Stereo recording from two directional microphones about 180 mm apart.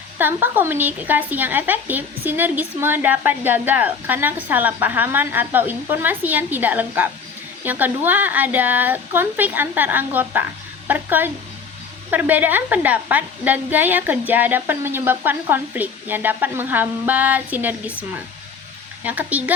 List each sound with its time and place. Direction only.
0.2 s speech: 10° right (ahead or behind)
19.0 s speech: 10° right (ahead or behind)